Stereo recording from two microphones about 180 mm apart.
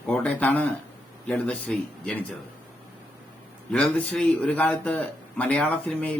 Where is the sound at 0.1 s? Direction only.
10° left (ahead or behind).